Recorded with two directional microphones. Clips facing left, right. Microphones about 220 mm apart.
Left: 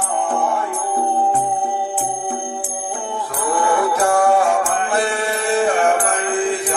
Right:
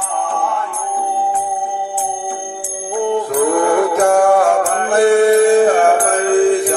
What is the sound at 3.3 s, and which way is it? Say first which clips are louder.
Mantra: right 4 dB; 45° right (ahead or behind).